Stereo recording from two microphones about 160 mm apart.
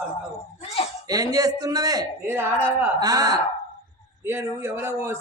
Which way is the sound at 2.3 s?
10° right (ahead or behind).